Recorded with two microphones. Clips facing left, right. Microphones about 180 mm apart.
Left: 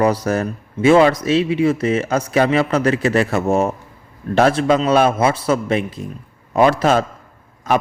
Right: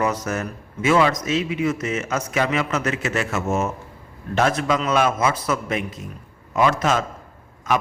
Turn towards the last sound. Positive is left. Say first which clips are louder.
# left 4 dB
turn(degrees=35)  # may be behind; listen again after turning